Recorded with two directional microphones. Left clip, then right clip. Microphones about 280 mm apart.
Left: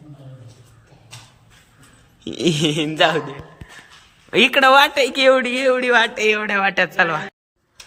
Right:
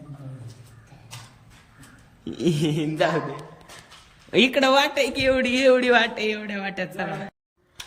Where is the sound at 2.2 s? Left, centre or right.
Centre.